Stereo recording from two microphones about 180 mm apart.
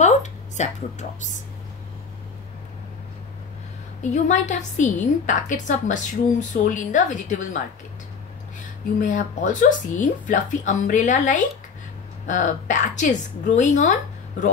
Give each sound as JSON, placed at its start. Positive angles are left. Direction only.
{"t": 0.0, "sound": "a sound", "side_deg": 40}
{"t": 4.0, "sound": "a woman's voice", "side_deg": 40}
{"t": 9.0, "sound": "a woman's voice", "side_deg": 45}